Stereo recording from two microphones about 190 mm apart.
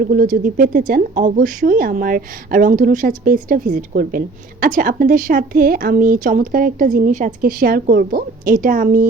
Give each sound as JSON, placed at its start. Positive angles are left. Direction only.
{"t": 0.1, "sound": "a woman's voice", "side_deg": -50}